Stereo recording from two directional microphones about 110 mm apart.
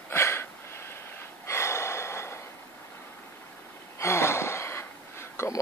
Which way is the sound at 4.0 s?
25° left (ahead or behind).